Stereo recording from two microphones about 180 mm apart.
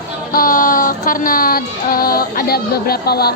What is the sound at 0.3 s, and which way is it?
Music, 50° left (ahead or behind).